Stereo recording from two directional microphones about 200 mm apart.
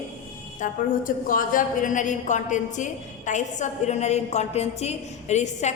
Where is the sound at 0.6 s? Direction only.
45° left (ahead or behind).